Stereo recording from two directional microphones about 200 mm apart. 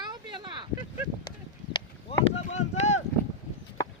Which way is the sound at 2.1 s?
30° left (ahead or behind).